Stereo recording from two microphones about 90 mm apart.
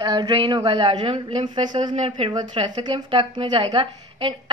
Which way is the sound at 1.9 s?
85° right.